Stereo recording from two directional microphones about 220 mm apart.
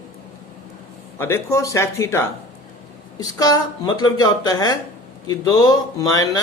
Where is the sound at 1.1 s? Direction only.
10° left (ahead or behind).